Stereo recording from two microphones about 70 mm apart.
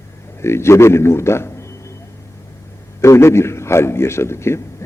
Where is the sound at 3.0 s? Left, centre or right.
Left.